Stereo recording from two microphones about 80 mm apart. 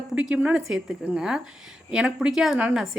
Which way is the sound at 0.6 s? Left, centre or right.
Centre.